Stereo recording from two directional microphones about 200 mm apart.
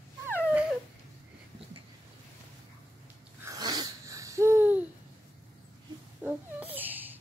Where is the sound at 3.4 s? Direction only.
20° right (ahead or behind).